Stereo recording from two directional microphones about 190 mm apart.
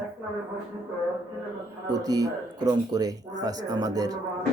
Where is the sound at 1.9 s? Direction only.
20° right (ahead or behind).